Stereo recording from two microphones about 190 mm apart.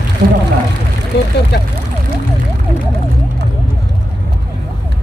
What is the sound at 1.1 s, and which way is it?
Speech, 60° left (ahead or behind).